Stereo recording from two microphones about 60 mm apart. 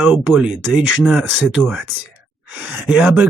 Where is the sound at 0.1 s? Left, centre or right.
Centre.